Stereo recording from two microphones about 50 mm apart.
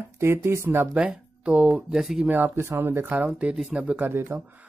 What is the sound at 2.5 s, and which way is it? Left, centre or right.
Speech, right.